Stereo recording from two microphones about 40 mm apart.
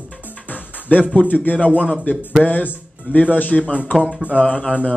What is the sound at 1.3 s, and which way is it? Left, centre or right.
Speech, left.